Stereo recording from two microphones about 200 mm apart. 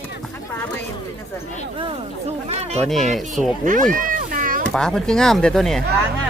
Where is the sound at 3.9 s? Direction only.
40° right (ahead or behind).